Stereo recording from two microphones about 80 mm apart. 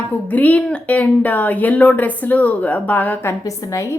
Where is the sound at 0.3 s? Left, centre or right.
Left.